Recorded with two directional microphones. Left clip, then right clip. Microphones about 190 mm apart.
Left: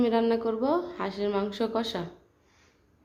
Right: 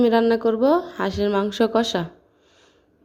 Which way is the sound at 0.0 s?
35° right (ahead or behind).